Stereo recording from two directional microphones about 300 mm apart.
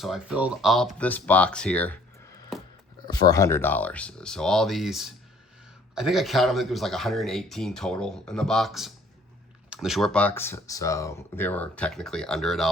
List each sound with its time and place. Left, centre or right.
0.0 s speech: centre